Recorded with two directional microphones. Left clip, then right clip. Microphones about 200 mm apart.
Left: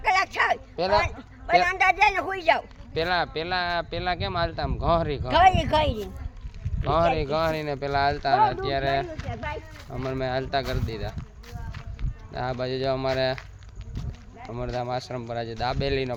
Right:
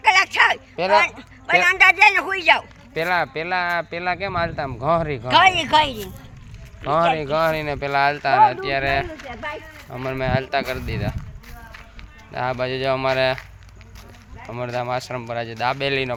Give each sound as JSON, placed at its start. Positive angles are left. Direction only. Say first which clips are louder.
{"t": 0.0, "sound": "bow-wow", "louder": "right 7 dB", "side_deg": 10}
{"t": 0.8, "sound": "speech", "louder": "right 6 dB", "side_deg": -35}
{"t": 1.0, "sound": "a sound", "louder": "right 8 dB", "side_deg": 10}
{"t": 1.6, "sound": "a man's voice", "louder": "right 11 dB", "side_deg": 10}
{"t": 2.9, "sound": "speech", "louder": "right 4 dB", "side_deg": -30}
{"t": 5.3, "sound": "a man's voice", "louder": "right 4 dB", "side_deg": 15}
{"t": 6.8, "sound": "speech", "louder": "right 4 dB", "side_deg": -30}
{"t": 12.3, "sound": "speech", "louder": "right 5 dB", "side_deg": -5}
{"t": 14.4, "sound": "speech", "louder": "right 5 dB", "side_deg": 0}